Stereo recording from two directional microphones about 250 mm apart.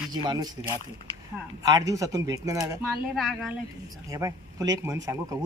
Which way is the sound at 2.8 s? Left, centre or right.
Centre.